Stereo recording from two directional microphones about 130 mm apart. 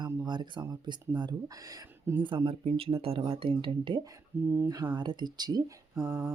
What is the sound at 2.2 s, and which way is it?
Speech, 40° right (ahead or behind).